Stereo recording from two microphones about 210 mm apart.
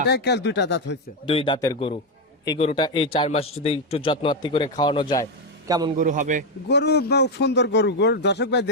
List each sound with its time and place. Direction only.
0.1 s speech: 55° left (ahead or behind)
1.3 s a man's voice: 25° left (ahead or behind)
5.6 s a man's voice: 20° right (ahead or behind)
6.0 s a man's voice: 35° right (ahead or behind)
6.7 s a man's voice: 50° left (ahead or behind)